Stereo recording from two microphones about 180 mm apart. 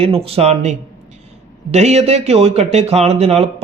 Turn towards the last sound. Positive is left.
turn(degrees=-35)  # may be behind; listen again after turning